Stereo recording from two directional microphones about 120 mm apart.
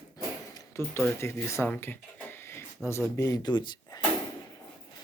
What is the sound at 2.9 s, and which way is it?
Speech, 25° left (ahead or behind).